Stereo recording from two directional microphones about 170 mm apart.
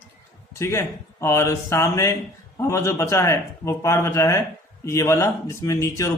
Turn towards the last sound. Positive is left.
turn(degrees=20)  # may be behind; listen again after turning